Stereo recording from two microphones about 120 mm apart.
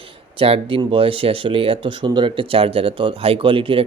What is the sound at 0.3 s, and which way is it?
Speech, 50° right (ahead or behind).